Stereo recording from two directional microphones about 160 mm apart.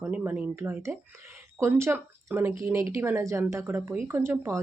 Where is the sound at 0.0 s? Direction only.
10° right (ahead or behind).